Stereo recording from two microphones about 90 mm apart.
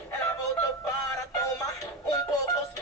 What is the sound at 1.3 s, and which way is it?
Music, 40° left (ahead or behind).